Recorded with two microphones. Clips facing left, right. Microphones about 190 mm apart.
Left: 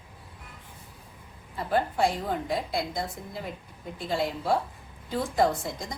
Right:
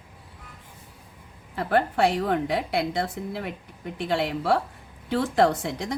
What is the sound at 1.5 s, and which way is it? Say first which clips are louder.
A woman's voice: right 4 dB; 70° right (ahead or behind).